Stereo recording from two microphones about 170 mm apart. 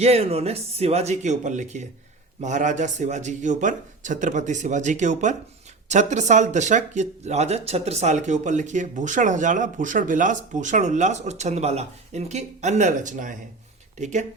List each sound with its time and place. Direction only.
0.0 s speech: 35° right (ahead or behind)